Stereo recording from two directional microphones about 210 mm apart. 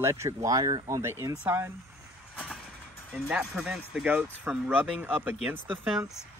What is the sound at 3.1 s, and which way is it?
Speech, 5° right (ahead or behind).